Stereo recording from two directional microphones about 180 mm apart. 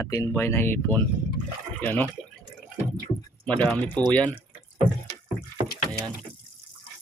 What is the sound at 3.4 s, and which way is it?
Speech, 5° left (ahead or behind).